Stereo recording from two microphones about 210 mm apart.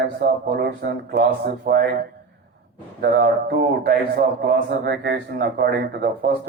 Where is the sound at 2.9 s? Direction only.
50° right (ahead or behind).